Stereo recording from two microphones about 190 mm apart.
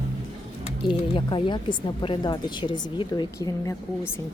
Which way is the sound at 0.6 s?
25° left (ahead or behind).